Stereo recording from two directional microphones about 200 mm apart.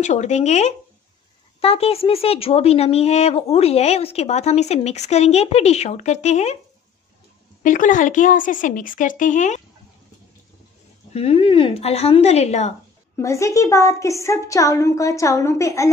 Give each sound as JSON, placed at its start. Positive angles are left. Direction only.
{"t": 0.0, "sound": "speech", "side_deg": 35}
{"t": 7.6, "sound": "speech", "side_deg": 40}
{"t": 11.1, "sound": "speech", "side_deg": 30}
{"t": 13.1, "sound": "a woman's voice", "side_deg": 15}